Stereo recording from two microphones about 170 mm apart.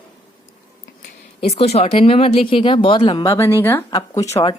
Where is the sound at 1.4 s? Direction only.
35° left (ahead or behind).